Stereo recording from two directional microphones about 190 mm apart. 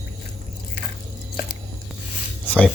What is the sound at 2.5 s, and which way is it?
Speech, 10° left (ahead or behind).